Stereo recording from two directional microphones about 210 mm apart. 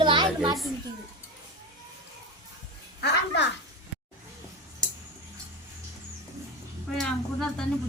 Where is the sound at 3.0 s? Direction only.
55° left (ahead or behind).